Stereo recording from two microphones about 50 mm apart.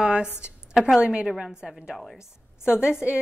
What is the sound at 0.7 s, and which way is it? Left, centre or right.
Speech, centre.